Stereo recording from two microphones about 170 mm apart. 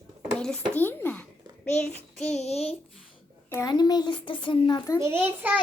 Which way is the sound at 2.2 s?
40° left (ahead or behind).